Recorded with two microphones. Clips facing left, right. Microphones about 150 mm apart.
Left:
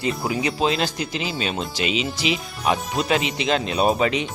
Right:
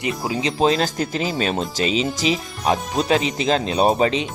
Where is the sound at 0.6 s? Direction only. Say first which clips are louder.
Right 7 dB; 40° right (ahead or behind).